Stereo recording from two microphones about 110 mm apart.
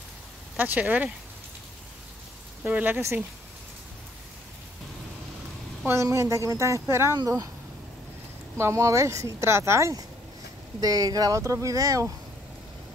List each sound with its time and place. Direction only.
0.6 s speech: 15° right (ahead or behind)
2.6 s speech: 15° right (ahead or behind)
5.9 s speech: 25° right (ahead or behind)
8.5 s speech: 25° right (ahead or behind)